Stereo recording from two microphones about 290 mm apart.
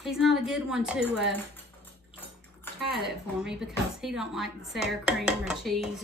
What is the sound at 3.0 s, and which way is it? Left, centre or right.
Speech, centre.